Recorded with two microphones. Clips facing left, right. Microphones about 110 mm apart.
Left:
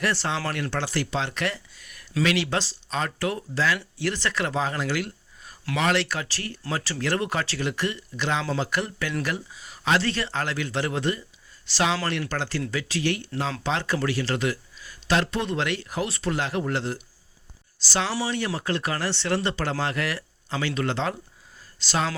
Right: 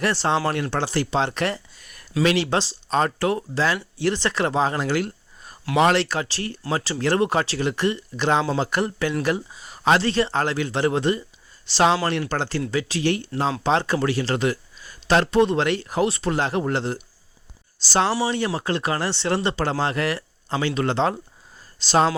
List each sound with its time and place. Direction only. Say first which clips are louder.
0.0 s speech: right 5 dB; 25° right (ahead or behind)
10.0 s speech: right 6 dB; 25° right (ahead or behind)